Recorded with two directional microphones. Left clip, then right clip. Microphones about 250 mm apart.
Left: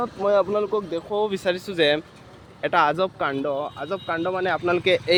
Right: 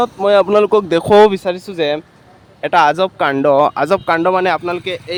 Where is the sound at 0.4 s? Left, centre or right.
Right.